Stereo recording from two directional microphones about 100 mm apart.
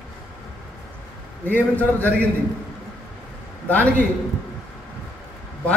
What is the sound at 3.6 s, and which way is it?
Speech, 15° left (ahead or behind).